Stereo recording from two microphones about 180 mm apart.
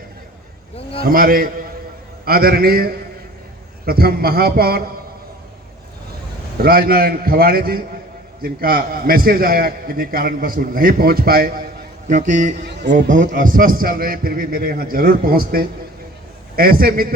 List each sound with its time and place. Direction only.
1.0 s a man's voice: 55° right (ahead or behind)
6.6 s a man's voice: 55° right (ahead or behind)
12.6 s speech: 70° right (ahead or behind)
13.1 s a man's voice: 45° right (ahead or behind)